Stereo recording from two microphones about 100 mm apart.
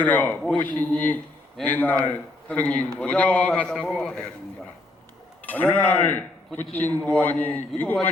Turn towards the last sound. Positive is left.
turn(degrees=15)  # may be behind; listen again after turning